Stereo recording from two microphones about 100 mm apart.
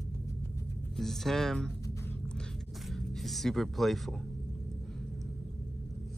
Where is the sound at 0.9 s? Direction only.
5° left (ahead or behind).